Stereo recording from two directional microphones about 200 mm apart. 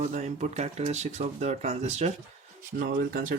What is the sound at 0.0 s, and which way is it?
Speech, 40° right (ahead or behind).